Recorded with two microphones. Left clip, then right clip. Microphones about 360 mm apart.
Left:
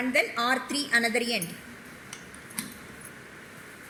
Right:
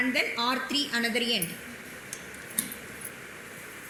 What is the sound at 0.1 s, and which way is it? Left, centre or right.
A woman's voice, left.